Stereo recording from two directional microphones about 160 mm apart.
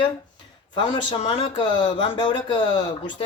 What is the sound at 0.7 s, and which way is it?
Speech, 30° left (ahead or behind).